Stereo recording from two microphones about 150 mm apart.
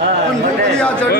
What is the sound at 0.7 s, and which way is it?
Speech, 5° left (ahead or behind).